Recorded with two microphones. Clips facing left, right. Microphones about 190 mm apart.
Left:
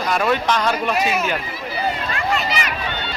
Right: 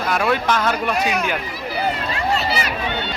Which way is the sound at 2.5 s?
35° right (ahead or behind).